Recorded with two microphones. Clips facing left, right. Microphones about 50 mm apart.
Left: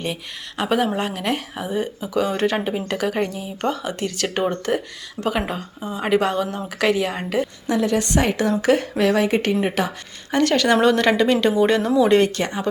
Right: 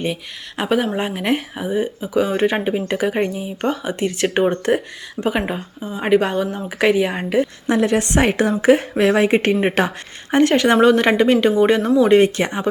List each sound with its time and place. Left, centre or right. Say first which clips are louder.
0.7 s a woman's voice: right 1 dB; centre
0.9 s speech: right 3 dB; centre
4.1 s speech: right 6 dB; right
6.0 s speech: right 3 dB; centre
7.7 s speech: right 2 dB; right
10.3 s speech: right 3 dB; right
12.4 s speech: right 3 dB; right